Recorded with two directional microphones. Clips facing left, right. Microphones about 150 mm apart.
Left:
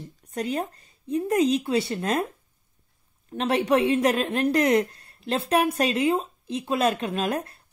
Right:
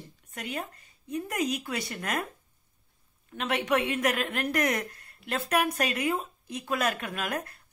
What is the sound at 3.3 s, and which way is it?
Speech, 35° left (ahead or behind).